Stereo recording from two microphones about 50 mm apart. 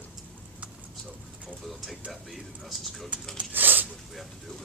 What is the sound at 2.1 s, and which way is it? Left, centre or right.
Speech, centre.